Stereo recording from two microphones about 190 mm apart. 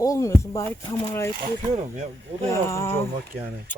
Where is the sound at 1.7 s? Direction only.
35° right (ahead or behind).